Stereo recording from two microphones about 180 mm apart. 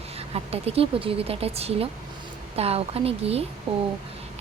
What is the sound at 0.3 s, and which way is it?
A woman's voice, 35° right (ahead or behind).